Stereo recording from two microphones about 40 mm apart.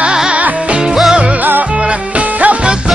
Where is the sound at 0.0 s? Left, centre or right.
Right.